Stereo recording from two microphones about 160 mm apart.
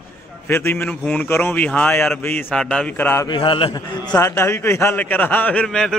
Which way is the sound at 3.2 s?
30° left (ahead or behind).